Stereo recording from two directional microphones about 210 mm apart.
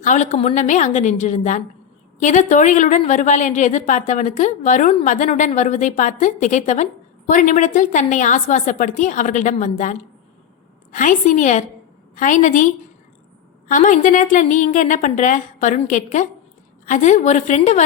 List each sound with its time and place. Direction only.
0.0 s a woman's voice: 35° left (ahead or behind)